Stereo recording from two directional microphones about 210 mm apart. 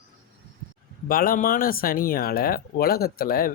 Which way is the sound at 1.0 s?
45° left (ahead or behind).